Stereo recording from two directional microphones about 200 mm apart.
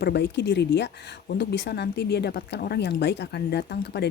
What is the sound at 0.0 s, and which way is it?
Speech, 60° left (ahead or behind).